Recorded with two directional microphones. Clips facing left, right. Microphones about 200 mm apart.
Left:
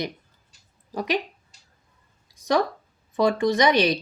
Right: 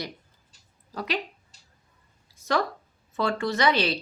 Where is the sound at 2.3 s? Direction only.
15° left (ahead or behind).